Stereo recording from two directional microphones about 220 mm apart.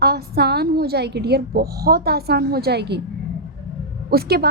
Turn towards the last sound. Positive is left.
turn(degrees=-45)  # may be behind; listen again after turning